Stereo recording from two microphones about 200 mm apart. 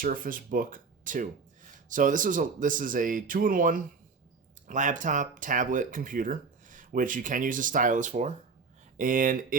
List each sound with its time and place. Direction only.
0.0 s a man's voice: 45° right (ahead or behind)